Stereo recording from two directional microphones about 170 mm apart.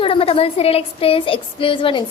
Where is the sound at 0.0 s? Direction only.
35° left (ahead or behind).